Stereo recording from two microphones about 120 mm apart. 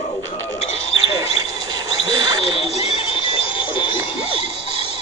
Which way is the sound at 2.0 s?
55° left (ahead or behind).